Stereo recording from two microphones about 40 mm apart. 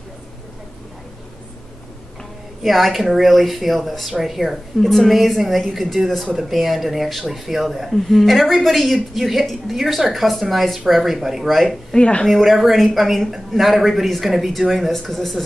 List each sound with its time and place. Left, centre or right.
2.6 s speech: centre
11.9 s speech: left
12.3 s speech: centre